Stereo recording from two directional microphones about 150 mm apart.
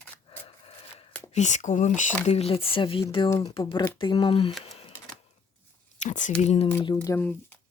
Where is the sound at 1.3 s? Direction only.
50° left (ahead or behind).